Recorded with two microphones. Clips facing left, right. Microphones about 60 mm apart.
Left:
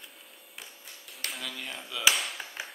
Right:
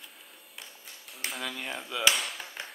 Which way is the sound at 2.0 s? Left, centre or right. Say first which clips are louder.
Left 1 dB; centre.